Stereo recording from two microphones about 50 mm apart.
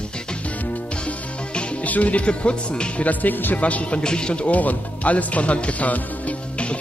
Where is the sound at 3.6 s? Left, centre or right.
Left.